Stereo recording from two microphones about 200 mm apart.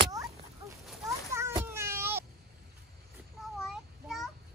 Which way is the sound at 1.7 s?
10° right (ahead or behind).